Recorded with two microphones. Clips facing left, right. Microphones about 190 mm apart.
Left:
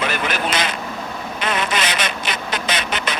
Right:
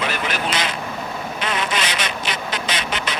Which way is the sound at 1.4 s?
55° left (ahead or behind).